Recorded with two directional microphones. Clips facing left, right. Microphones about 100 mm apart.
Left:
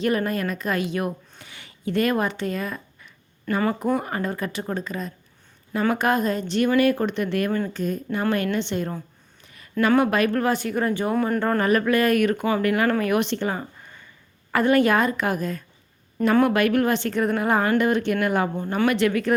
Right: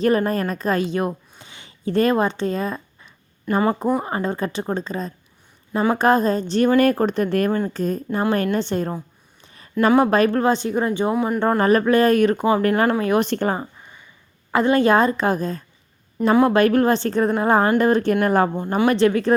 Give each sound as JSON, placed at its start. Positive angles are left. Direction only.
{"t": 0.0, "sound": "a woman's voice", "side_deg": -35}
{"t": 1.4, "sound": "a sound", "side_deg": -25}
{"t": 3.6, "sound": "a woman's voice", "side_deg": -30}
{"t": 9.4, "sound": "a sound", "side_deg": -30}
{"t": 10.0, "sound": "speech", "side_deg": -35}
{"t": 11.1, "sound": "speech", "side_deg": -10}
{"t": 11.6, "sound": "a woman's voice", "side_deg": -30}
{"t": 13.2, "sound": "speech", "side_deg": -45}
{"t": 13.6, "sound": "a sound", "side_deg": -15}
{"t": 14.5, "sound": "a woman's voice", "side_deg": -25}
{"t": 18.9, "sound": "a woman's voice", "side_deg": -30}